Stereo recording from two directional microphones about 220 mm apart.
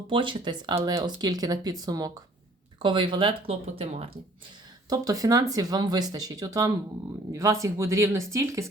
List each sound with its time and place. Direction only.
0.1 s speech: 20° right (ahead or behind)
4.9 s speech: 15° right (ahead or behind)